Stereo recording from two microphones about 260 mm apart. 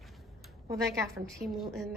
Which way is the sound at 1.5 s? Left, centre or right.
Centre.